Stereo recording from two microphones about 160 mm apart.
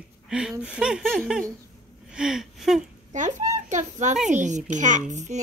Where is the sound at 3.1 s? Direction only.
50° right (ahead or behind).